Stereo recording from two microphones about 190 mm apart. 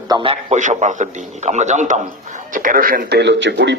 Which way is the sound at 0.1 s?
30° right (ahead or behind).